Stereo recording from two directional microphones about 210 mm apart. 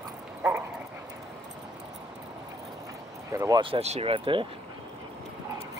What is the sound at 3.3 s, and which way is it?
Speech, 15° right (ahead or behind).